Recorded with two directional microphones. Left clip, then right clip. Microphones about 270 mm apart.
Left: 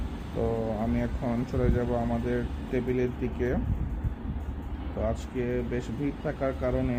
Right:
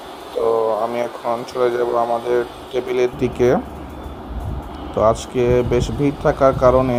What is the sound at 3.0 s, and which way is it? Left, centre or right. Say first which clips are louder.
Speech: right 13 dB; centre.